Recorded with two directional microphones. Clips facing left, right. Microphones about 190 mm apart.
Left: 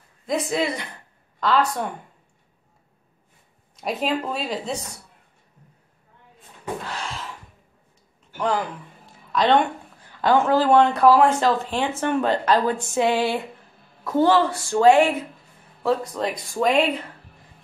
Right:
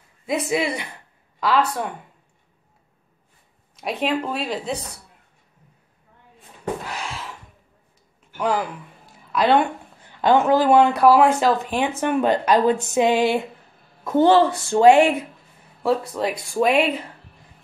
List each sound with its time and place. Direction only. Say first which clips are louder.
0.3 s speech: right 1 dB; 10° right (ahead or behind)
3.7 s speech: right 1 dB; centre (ahead or behind)
6.9 s gasp: right 1 dB; 5° right (ahead or behind)
9.3 s speech: right 1 dB; 10° right (ahead or behind)
10.2 s speech: right 2 dB; 20° right (ahead or behind)